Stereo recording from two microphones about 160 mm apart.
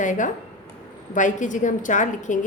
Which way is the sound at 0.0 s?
50° left (ahead or behind).